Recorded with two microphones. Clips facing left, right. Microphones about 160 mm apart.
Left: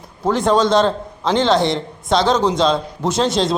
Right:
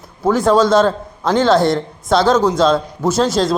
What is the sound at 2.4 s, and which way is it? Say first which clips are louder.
Speech: right 3 dB; 20° left (ahead or behind).